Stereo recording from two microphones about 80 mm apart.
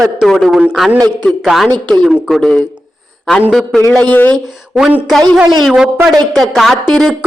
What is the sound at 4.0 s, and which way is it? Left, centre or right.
Speech, left.